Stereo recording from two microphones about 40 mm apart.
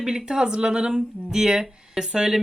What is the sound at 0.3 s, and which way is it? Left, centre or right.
Speech, centre.